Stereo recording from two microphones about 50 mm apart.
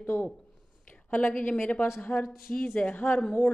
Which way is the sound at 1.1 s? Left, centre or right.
Left.